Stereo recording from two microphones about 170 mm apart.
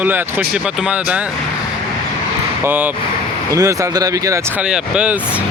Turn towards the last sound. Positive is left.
turn(degrees=-5)  # may be behind; listen again after turning